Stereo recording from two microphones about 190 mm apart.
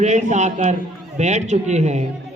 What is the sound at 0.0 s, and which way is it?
A man's voice, 40° right (ahead or behind).